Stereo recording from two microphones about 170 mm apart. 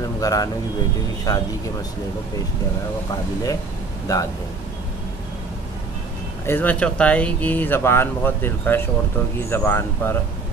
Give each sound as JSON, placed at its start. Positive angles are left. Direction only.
{"t": 0.2, "sound": "a man's voice", "side_deg": 20}
{"t": 4.1, "sound": "speech", "side_deg": 20}
{"t": 6.4, "sound": "speech", "side_deg": 10}